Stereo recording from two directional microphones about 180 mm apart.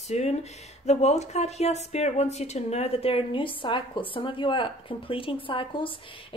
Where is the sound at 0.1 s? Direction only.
40° left (ahead or behind).